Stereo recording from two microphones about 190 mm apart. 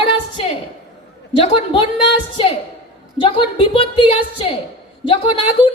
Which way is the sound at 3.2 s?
25° left (ahead or behind).